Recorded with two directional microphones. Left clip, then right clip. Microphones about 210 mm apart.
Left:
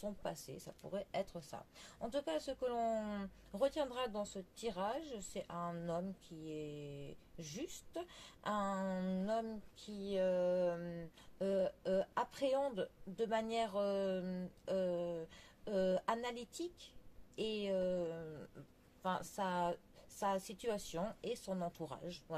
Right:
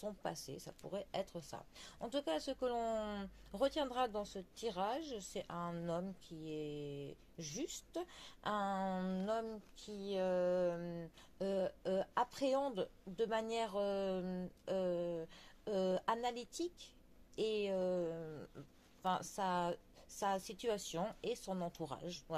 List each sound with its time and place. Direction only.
0.0 s speech: 35° right (ahead or behind)